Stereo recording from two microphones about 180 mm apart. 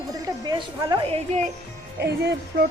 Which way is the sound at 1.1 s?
40° right (ahead or behind).